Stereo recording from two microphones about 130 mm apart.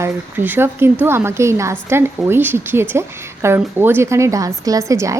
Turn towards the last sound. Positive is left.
turn(degrees=-25)  # may be behind; listen again after turning